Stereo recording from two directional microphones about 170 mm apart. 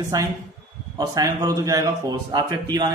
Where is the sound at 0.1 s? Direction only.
20° right (ahead or behind).